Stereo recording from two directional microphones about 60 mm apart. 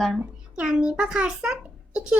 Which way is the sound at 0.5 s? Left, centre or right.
Centre.